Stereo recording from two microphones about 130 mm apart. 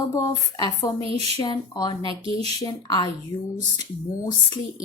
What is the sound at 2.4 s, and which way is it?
Speech, 30° left (ahead or behind).